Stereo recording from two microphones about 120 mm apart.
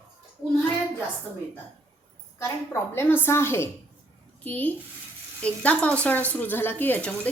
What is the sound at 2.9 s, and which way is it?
A woman's voice, 20° left (ahead or behind).